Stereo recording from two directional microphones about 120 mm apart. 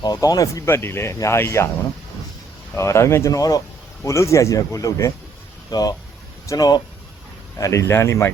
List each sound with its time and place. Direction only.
0.0 s speech: 35° left (ahead or behind)
2.7 s speech: 25° left (ahead or behind)